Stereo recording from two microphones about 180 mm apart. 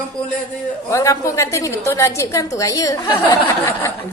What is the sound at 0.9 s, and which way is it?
A woman's voice, 15° left (ahead or behind).